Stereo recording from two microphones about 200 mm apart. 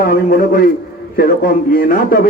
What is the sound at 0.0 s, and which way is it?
A man's voice, 45° left (ahead or behind).